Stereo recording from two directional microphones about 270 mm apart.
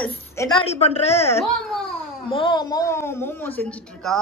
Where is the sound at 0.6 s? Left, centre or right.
Left.